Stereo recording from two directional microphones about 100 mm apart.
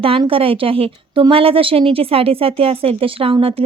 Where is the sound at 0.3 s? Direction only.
65° right (ahead or behind).